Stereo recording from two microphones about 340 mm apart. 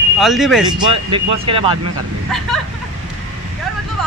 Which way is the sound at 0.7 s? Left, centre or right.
Centre.